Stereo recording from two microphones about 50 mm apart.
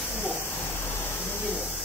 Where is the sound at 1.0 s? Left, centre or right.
Left.